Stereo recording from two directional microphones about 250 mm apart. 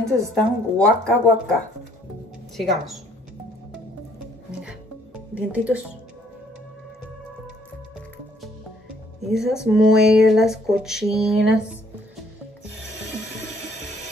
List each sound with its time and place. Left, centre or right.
0.3 s speech: centre
5.3 s speech: centre
9.3 s speech: centre